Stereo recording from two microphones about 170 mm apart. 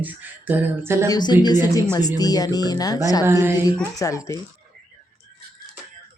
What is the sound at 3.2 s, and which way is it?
Speech, 15° right (ahead or behind).